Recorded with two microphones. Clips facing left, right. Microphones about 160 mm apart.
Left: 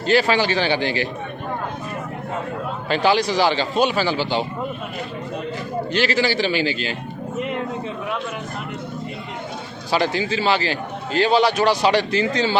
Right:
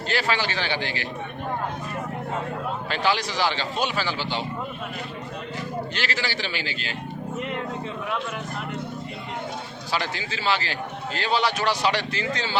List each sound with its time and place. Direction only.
0.1 s a man's voice: 15° left (ahead or behind)
2.9 s a man's voice: 15° left (ahead or behind)
5.9 s a man's voice: 15° left (ahead or behind)
7.3 s a sound: 15° left (ahead or behind)
10.0 s a man's voice: 15° left (ahead or behind)